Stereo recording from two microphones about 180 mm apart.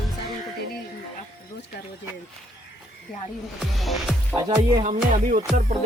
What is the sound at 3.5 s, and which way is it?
Speech, centre (ahead or behind).